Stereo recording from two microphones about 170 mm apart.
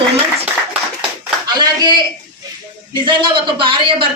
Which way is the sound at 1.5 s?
25° right (ahead or behind).